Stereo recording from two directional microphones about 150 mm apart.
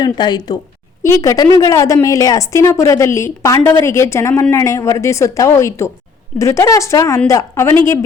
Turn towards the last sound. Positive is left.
turn(degrees=20)  # may be behind; listen again after turning